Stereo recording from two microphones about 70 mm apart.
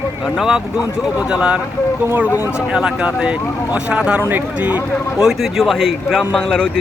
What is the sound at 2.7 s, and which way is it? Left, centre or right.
Speech, centre.